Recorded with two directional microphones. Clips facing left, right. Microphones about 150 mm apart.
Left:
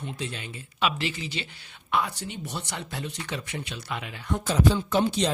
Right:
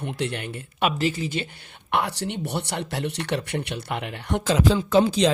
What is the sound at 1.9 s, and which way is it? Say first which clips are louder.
Speech: right 3 dB; 70° right (ahead or behind).